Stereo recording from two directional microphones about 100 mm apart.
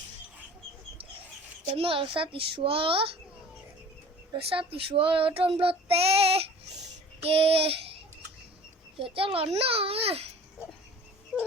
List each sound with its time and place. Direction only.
1.7 s child singing: 65° right (ahead or behind)
4.4 s child singing: 75° right (ahead or behind)
9.0 s a child's voice: 60° right (ahead or behind)
9.6 s child singing: 75° right (ahead or behind)